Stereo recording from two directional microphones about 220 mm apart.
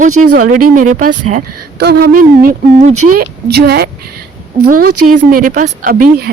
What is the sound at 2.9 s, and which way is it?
Speech, 90° right.